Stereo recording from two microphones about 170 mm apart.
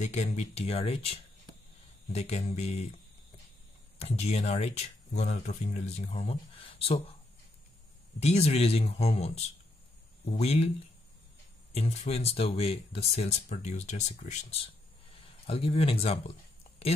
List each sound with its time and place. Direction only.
0.0 s speech: 40° left (ahead or behind)
4.0 s speech: 40° left (ahead or behind)
8.2 s speech: 40° left (ahead or behind)
11.7 s speech: 40° left (ahead or behind)